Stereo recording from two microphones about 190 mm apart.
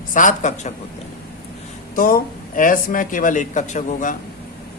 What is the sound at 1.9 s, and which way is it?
Speech, 45° left (ahead or behind).